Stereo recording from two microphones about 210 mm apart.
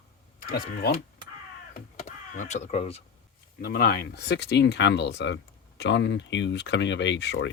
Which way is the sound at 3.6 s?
45° left (ahead or behind).